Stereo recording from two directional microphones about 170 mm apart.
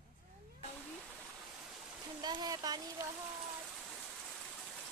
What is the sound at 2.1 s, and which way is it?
Speech, 25° right (ahead or behind).